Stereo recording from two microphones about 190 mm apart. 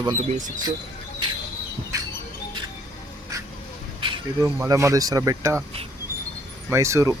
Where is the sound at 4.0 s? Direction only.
25° right (ahead or behind).